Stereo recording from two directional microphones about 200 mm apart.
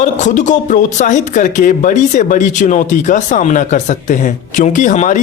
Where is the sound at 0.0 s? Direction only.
40° left (ahead or behind).